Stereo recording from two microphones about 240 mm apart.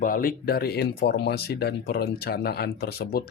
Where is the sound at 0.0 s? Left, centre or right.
Left.